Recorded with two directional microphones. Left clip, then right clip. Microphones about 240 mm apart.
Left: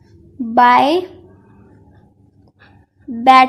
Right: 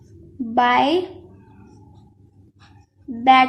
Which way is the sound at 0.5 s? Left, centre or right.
Centre.